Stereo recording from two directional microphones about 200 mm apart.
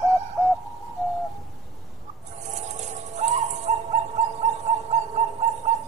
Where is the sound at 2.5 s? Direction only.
35° right (ahead or behind).